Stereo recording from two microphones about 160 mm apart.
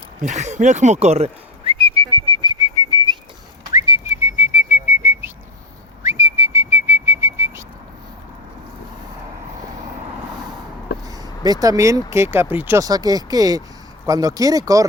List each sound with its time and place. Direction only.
0.2 s whistling: 45° right (ahead or behind); by 7.6 s 15° right (ahead or behind)
11.1 s speech: 25° right (ahead or behind)